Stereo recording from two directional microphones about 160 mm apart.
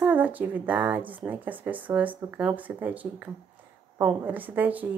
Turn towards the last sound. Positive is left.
turn(degrees=-10)  # may be behind; listen again after turning